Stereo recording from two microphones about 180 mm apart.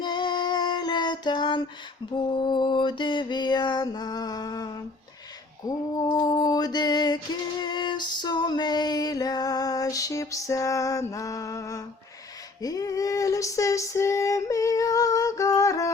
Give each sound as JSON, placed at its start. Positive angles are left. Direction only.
{"t": 0.0, "sound": "female singing", "side_deg": 25}
{"t": 2.3, "sound": "mantra", "side_deg": 25}
{"t": 12.6, "sound": "female singing", "side_deg": 20}